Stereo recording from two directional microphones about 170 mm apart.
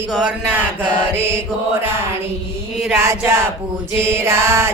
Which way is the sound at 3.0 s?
15° right (ahead or behind).